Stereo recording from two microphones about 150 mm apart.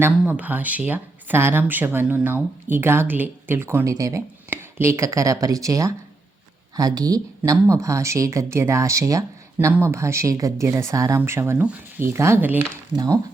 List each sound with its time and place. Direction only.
0.0 s speech: 10° right (ahead or behind)